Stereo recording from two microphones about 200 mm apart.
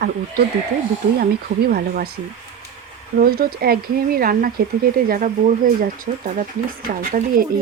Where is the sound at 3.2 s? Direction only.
50° right (ahead or behind).